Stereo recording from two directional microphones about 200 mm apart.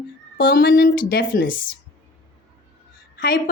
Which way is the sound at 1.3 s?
45° left (ahead or behind).